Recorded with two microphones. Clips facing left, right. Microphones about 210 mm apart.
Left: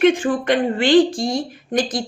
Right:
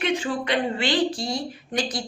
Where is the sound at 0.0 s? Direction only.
50° left (ahead or behind).